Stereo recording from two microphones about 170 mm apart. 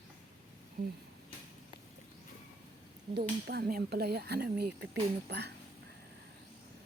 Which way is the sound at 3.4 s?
70° right (ahead or behind).